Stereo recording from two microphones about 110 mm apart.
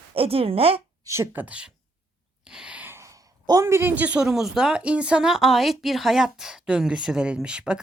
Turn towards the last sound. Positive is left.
turn(degrees=-10)  # may be behind; listen again after turning